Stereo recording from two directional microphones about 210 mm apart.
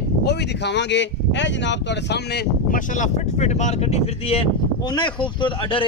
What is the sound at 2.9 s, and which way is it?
A man's voice, 35° left (ahead or behind).